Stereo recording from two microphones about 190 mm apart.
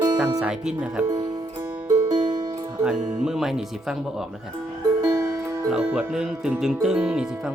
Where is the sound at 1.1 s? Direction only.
20° right (ahead or behind).